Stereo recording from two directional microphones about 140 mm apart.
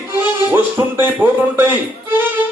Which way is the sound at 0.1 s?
15° right (ahead or behind).